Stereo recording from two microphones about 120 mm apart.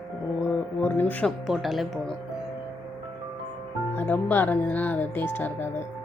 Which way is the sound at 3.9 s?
15° left (ahead or behind).